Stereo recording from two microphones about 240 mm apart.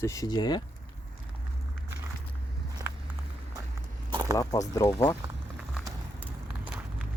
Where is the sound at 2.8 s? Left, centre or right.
Centre.